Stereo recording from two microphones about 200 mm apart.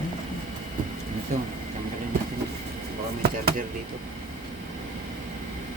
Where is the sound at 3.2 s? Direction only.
50° right (ahead or behind).